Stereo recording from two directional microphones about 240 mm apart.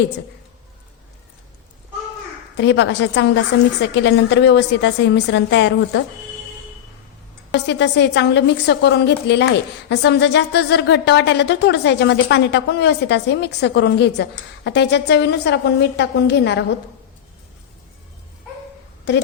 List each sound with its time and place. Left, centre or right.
2.6 s speech: left
7.5 s speech: left